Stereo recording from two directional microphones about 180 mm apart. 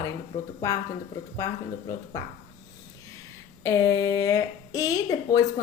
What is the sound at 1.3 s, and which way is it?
Speech, 15° left (ahead or behind).